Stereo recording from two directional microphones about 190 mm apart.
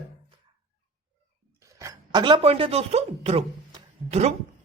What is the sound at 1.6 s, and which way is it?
A woman's voice, 15° right (ahead or behind).